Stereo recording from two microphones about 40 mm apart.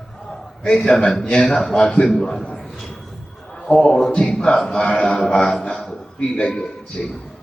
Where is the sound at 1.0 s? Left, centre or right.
Left.